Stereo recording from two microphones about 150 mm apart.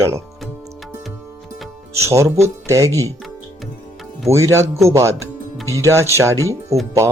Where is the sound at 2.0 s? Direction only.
20° right (ahead or behind).